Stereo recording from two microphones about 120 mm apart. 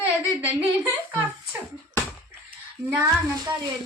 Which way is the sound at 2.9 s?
25° right (ahead or behind).